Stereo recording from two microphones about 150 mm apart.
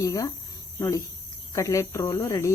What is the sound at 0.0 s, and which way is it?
Speech, 25° left (ahead or behind).